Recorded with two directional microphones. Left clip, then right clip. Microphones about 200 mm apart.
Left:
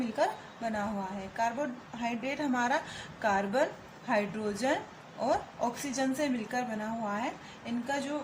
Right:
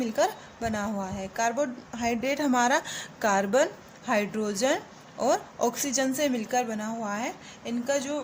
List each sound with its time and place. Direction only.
0.0 s a woman's voice: 55° right (ahead or behind)